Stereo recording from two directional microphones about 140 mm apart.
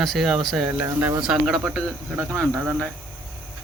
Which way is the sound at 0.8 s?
20° right (ahead or behind).